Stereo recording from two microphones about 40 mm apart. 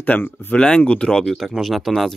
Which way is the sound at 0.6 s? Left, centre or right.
Left.